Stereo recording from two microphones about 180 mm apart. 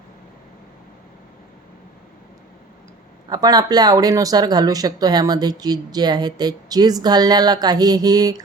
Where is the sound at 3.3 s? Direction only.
20° right (ahead or behind).